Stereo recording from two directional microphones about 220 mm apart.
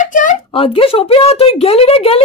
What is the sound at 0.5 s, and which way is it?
A woman's voice, 25° left (ahead or behind).